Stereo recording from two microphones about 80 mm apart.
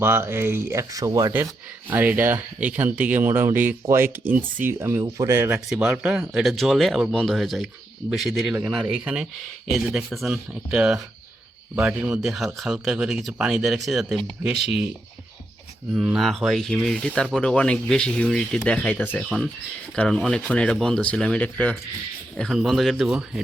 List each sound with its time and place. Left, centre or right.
0.0 s speech: right
1.9 s speech: right
5.5 s speech: centre
8.7 s speech: centre
9.6 s speech: centre
10.5 s speech: centre
12.2 s speech: centre
15.9 s speech: centre; by 19.2 s left
20.1 s speech: centre
22.5 s speech: centre